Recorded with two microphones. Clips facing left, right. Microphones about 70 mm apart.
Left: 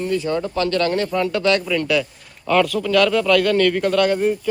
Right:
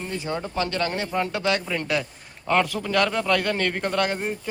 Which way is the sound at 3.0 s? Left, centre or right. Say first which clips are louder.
Left 6 dB; right.